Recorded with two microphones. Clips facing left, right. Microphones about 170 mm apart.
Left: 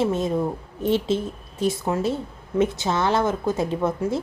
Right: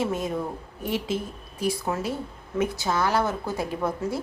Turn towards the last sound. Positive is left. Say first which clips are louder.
# left 4 dB
turn(degrees=20)  # may be behind; listen again after turning